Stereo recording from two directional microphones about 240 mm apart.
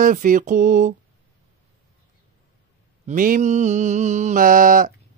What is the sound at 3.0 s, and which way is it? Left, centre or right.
Speech, right.